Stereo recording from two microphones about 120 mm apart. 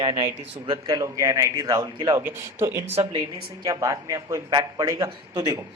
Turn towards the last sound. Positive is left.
turn(degrees=-25)  # may be behind; listen again after turning